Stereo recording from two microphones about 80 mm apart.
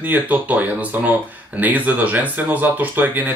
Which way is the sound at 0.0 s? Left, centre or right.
Right.